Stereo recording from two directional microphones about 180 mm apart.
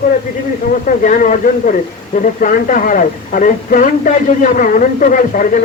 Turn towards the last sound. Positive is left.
turn(degrees=45)  # may be behind; listen again after turning